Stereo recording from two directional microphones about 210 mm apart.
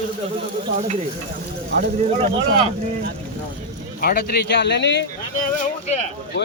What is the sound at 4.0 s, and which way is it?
A man's voice, 45° left (ahead or behind).